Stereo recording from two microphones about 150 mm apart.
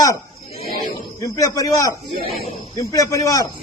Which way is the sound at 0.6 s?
80° left.